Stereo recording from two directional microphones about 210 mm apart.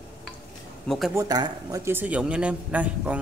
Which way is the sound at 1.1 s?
15° right (ahead or behind).